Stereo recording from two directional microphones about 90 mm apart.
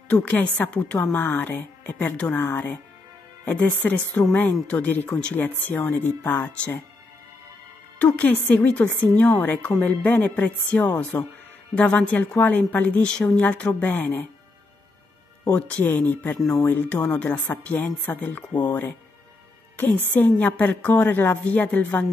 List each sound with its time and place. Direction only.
0.1 s a woman's voice: 15° left (ahead or behind)
8.0 s a woman's voice: 20° left (ahead or behind)
15.5 s a woman's voice: 15° left (ahead or behind)
16.3 s speech: centre (ahead or behind)
16.6 s a woman's voice: 20° left (ahead or behind)